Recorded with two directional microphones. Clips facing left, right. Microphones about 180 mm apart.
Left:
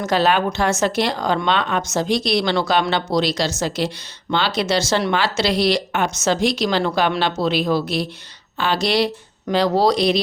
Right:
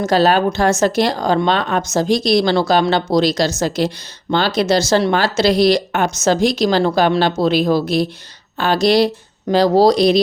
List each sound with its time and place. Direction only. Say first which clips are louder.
0.0 s speech: right 4 dB; 35° right (ahead or behind)